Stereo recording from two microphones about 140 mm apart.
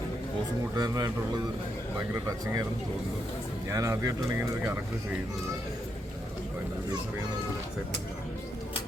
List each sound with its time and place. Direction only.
0.8 s speech: 25° right (ahead or behind)
3.7 s speech: 20° right (ahead or behind)